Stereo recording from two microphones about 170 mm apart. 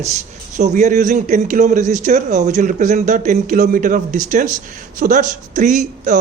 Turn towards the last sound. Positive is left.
turn(degrees=-45)  # may be behind; listen again after turning